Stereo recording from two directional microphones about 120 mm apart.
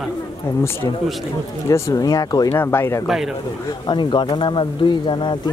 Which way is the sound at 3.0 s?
Centre (ahead or behind).